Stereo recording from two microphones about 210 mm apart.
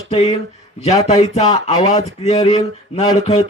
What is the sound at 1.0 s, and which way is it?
Speech, 30° left (ahead or behind).